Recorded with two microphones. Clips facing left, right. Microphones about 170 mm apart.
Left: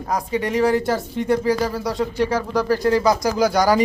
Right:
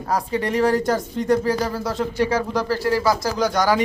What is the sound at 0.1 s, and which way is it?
Speech, 10° left (ahead or behind).